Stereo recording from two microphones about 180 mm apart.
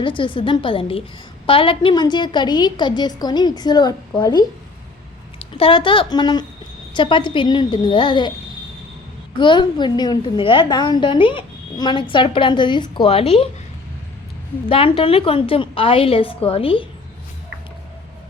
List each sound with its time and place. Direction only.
0.0 s a woman's voice: 30° left (ahead or behind)
5.5 s a woman's voice: 30° left (ahead or behind)
9.4 s a woman's voice: 25° left (ahead or behind)
14.7 s a woman's voice: 30° left (ahead or behind)